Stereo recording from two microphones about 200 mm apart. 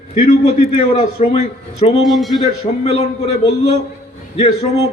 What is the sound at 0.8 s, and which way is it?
A man's voice, 30° left (ahead or behind).